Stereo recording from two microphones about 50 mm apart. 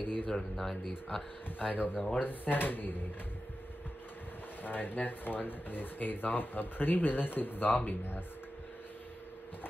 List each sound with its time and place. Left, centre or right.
0.0 s speech: left
0.3 s speech: centre
1.6 s speech: left
4.6 s speech: left